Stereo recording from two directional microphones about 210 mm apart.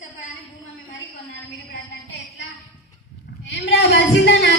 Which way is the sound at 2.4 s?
60° left (ahead or behind).